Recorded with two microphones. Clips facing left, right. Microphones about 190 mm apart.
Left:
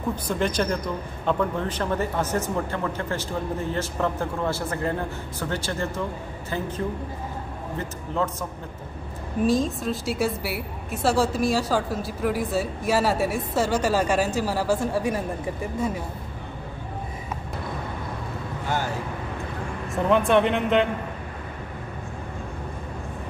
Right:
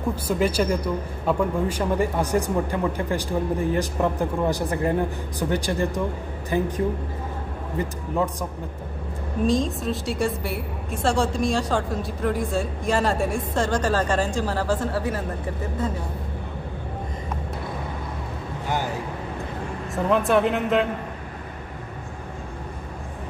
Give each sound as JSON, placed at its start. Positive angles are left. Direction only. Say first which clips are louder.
{"t": 0.1, "sound": "speech", "louder": "right 3 dB", "side_deg": -5}
{"t": 9.5, "sound": "a woman's voice", "louder": "even", "side_deg": 0}
{"t": 20.0, "sound": "a woman's voice", "louder": "even", "side_deg": 0}